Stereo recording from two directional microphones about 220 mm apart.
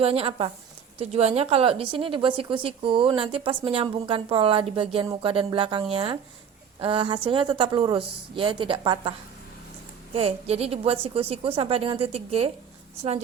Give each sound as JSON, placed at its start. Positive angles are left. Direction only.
{"t": 0.0, "sound": "a woman's voice", "side_deg": -25}